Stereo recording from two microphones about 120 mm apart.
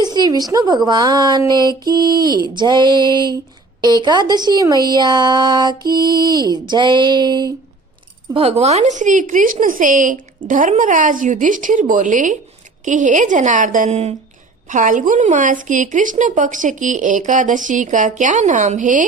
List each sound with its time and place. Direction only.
0.0 s a woman's voice: 35° right (ahead or behind)
8.3 s a woman's voice: 50° right (ahead or behind)
14.7 s a woman's voice: 90° right